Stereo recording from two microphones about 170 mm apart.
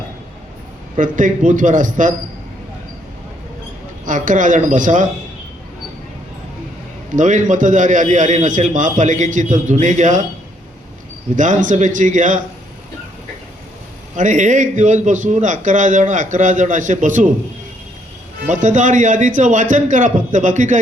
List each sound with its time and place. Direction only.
0.9 s a man's voice: 50° right (ahead or behind)
4.0 s a man's voice: 50° right (ahead or behind)
7.2 s a man's voice: 45° right (ahead or behind)
11.3 s a man's voice: 50° right (ahead or behind)
14.2 s a man's voice: 45° right (ahead or behind)
18.4 s a man's voice: 45° right (ahead or behind)